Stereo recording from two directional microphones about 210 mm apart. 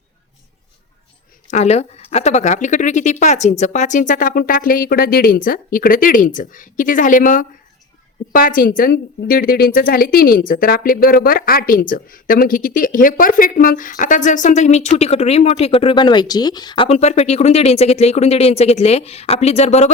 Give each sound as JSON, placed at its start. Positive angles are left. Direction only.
{"t": 1.5, "sound": "speech", "side_deg": 30}